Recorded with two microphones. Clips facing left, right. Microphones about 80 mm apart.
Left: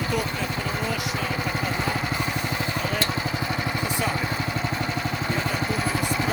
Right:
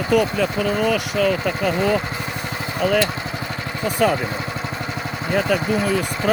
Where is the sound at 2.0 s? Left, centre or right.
Centre.